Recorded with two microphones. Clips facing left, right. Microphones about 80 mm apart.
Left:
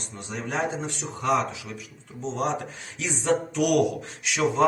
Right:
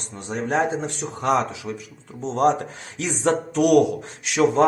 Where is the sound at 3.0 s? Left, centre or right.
Right.